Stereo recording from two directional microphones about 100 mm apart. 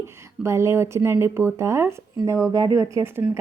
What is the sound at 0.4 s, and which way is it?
A woman's voice, 30° right (ahead or behind).